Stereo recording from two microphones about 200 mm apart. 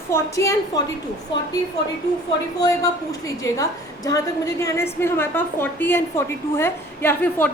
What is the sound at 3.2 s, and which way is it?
A woman's voice, 15° left (ahead or behind).